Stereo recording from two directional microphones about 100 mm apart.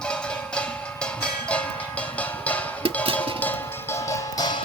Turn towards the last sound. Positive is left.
turn(degrees=40)  # may be behind; listen again after turning